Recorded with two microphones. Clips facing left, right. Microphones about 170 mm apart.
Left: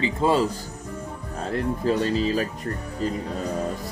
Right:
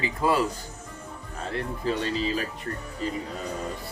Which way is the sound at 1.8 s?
40° left (ahead or behind).